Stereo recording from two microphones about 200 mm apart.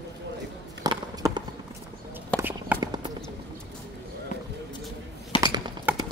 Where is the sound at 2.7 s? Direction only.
20° right (ahead or behind).